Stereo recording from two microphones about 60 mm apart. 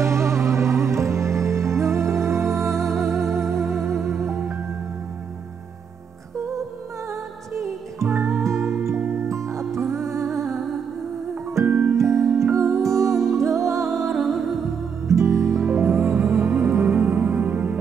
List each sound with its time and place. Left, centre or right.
0.0 s music: right
7.1 s music: right
9.3 s music: right
10.3 s music: centre
11.6 s music: right
11.9 s music: right
14.1 s music: centre
15.0 s music: right
15.6 s music: right